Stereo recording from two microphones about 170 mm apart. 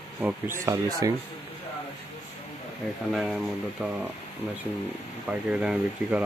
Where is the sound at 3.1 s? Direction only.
Centre (ahead or behind).